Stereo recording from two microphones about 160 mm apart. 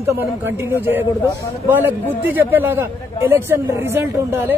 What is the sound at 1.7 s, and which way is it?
A woman's voice, 10° right (ahead or behind).